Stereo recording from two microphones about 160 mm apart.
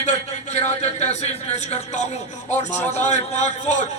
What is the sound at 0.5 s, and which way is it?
A man's voice, 45° left (ahead or behind).